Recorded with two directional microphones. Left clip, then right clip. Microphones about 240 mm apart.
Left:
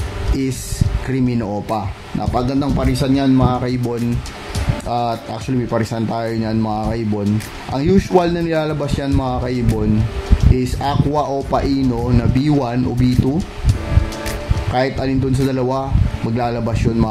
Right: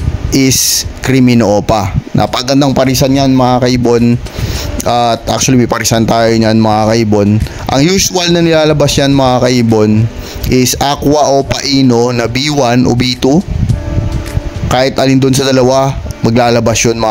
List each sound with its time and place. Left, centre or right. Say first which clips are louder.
1.0 s a man's voice: right 12 dB; right
14.7 s a man's voice: right 9 dB; right